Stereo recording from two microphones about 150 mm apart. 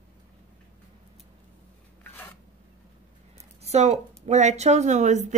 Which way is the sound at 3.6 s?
45° right (ahead or behind).